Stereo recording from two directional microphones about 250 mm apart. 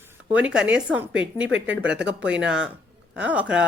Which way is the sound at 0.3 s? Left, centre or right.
Centre.